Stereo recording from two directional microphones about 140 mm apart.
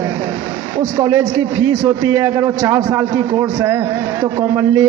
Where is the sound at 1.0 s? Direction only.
25° right (ahead or behind).